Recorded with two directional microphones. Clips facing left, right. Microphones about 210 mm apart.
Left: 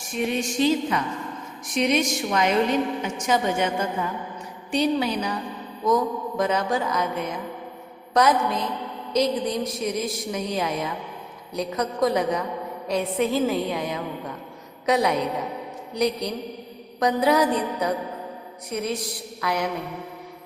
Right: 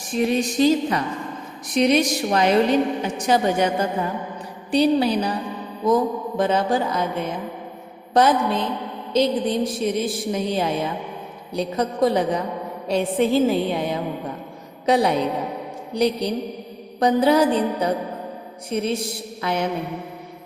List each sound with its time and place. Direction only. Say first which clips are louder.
0.1 s a woman's voice: right 5 dB; 35° right (ahead or behind)